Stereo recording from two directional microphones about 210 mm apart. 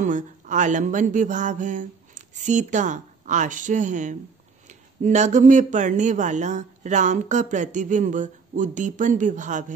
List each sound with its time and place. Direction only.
0.0 s speech: 35° right (ahead or behind)